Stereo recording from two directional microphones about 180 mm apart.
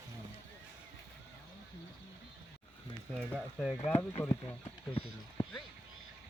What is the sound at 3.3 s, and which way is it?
Speech, 5° right (ahead or behind).